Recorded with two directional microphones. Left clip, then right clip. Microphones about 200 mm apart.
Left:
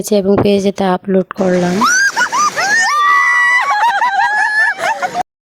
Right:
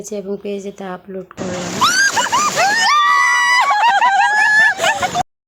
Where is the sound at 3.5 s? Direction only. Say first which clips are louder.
Left 1 dB; 15° right (ahead or behind).